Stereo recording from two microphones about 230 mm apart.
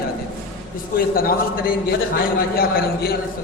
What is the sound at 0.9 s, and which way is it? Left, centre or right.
A man's voice, left.